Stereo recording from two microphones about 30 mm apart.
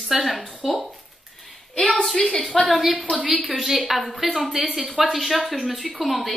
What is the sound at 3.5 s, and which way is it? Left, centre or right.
A woman's voice, centre.